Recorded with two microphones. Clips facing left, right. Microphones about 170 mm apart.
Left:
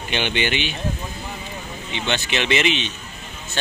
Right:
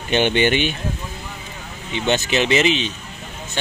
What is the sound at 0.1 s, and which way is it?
Speech, 45° right (ahead or behind).